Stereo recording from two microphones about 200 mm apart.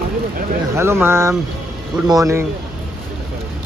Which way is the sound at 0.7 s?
15° right (ahead or behind).